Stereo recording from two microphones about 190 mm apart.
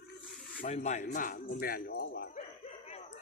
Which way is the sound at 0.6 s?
40° left (ahead or behind).